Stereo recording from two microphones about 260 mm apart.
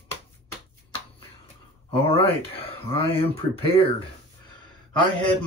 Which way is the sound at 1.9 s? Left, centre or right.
Left.